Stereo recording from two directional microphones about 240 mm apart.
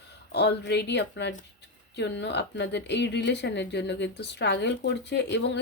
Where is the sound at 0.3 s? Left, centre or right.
Left.